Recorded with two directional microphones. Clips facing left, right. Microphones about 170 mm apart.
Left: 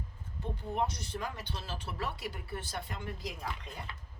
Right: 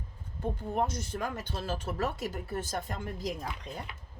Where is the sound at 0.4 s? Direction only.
45° right (ahead or behind).